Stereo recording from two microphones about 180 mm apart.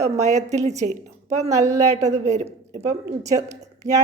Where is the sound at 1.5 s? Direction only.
15° right (ahead or behind).